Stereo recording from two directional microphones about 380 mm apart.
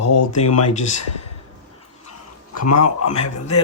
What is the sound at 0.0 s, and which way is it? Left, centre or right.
Speech, left.